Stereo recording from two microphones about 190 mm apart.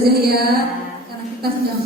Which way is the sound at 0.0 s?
55° right (ahead or behind).